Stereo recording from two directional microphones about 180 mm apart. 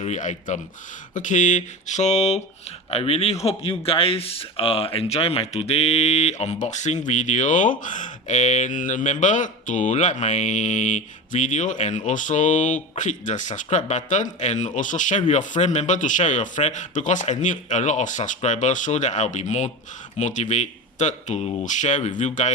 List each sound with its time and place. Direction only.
0.0 s speech: 40° left (ahead or behind)